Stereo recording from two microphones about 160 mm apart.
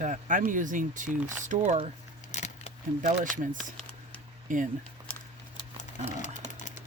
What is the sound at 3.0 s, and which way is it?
Speech, 55° right (ahead or behind).